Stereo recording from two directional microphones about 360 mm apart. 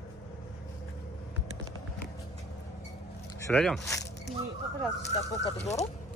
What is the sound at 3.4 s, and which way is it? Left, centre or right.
Zipper, centre.